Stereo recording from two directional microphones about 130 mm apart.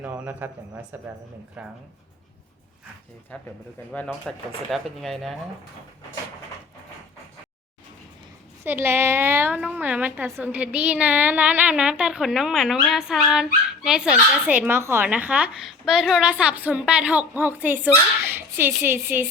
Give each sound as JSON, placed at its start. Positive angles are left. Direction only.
{"t": 0.0, "sound": "speech", "side_deg": -15}
{"t": 3.3, "sound": "speech", "side_deg": 10}
{"t": 8.6, "sound": "a woman's voice", "side_deg": -15}